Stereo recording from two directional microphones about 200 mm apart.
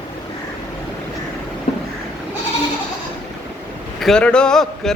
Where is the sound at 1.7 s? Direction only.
30° left (ahead or behind).